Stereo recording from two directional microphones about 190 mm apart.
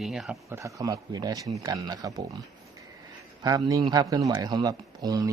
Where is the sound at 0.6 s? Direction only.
20° right (ahead or behind).